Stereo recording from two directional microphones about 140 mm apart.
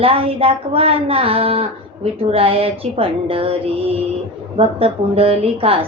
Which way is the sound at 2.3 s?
40° right (ahead or behind).